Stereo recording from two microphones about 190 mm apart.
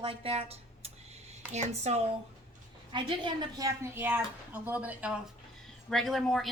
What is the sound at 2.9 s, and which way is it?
Speech, 25° right (ahead or behind).